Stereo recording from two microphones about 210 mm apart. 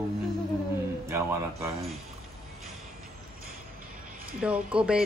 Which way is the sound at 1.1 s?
15° right (ahead or behind).